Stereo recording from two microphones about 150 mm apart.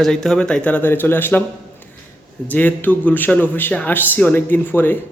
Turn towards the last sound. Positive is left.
turn(degrees=15)  # may be behind; listen again after turning